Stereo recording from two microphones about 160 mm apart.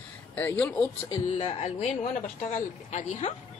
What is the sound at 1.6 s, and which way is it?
A woman's voice, 45° left (ahead or behind).